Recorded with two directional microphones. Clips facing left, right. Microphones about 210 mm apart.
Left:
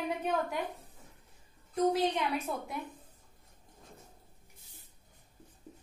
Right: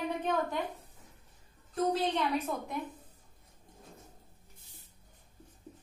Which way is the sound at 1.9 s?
10° left (ahead or behind).